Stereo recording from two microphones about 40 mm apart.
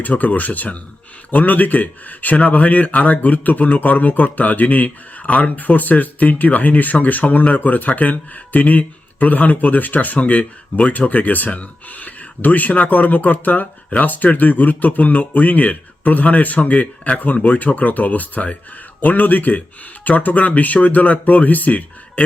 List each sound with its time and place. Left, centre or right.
0.0 s speech: left